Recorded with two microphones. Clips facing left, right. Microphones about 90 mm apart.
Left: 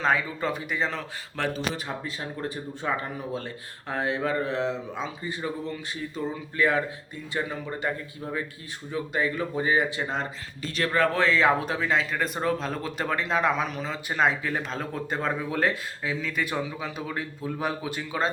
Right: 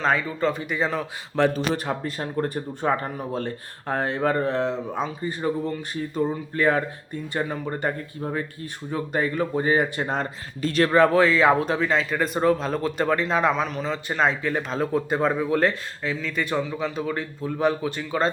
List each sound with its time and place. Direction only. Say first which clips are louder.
0.0 s speech: right 3 dB; 5° left (ahead or behind)
1.5 s speech: right 6 dB; 50° right (ahead or behind)
11.1 s speech: right 4 dB; 5° right (ahead or behind)